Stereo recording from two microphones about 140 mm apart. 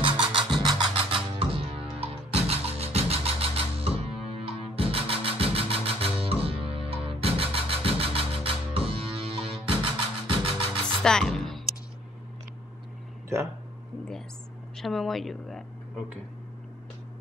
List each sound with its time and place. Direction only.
0.0 s music: 35° right (ahead or behind)
11.0 s music: 5° left (ahead or behind)
14.8 s speech: centre (ahead or behind)